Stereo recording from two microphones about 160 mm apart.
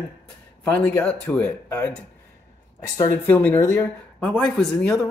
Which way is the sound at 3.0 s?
10° left (ahead or behind).